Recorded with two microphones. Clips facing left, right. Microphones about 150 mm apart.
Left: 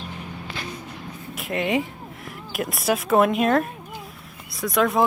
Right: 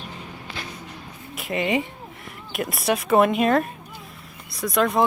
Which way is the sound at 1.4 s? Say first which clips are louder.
Even; centre (ahead or behind).